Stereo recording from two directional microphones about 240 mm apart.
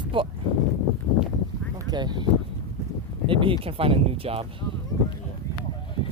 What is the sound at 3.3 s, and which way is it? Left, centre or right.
Speech, right.